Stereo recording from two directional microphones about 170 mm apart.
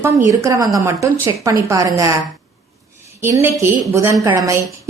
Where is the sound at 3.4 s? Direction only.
15° right (ahead or behind).